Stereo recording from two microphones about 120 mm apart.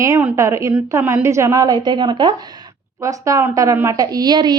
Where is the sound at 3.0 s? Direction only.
25° right (ahead or behind).